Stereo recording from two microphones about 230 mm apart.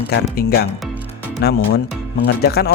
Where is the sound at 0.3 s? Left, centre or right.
Left.